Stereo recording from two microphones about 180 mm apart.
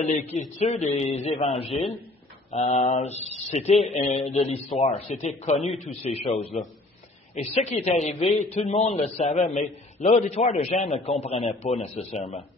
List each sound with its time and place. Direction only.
0.3 s a man's voice: 40° left (ahead or behind)